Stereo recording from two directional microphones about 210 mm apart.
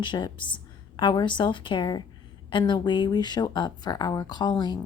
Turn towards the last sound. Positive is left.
turn(degrees=20)  # may be behind; listen again after turning